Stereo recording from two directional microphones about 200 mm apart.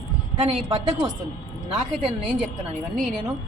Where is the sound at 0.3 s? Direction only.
35° right (ahead or behind).